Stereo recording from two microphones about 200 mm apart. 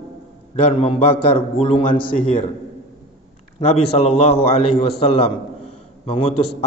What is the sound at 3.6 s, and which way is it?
A man's voice, 30° left (ahead or behind).